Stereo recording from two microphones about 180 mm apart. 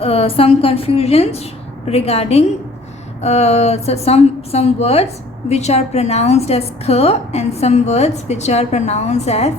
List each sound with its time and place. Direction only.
0.0 s a woman's voice: 35° left (ahead or behind)